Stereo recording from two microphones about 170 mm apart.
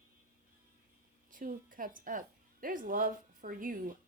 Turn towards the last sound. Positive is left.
turn(degrees=-55)  # may be behind; listen again after turning